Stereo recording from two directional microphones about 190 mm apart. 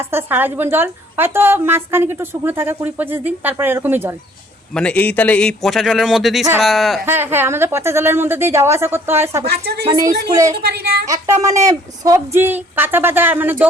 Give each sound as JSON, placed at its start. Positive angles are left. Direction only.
{"t": 0.0, "sound": "a woman's voice", "side_deg": -10}
{"t": 4.7, "sound": "a man's voice", "side_deg": 5}
{"t": 7.0, "sound": "a woman's voice", "side_deg": -10}
{"t": 9.5, "sound": "speech", "side_deg": -55}
{"t": 9.8, "sound": "a woman's voice", "side_deg": -15}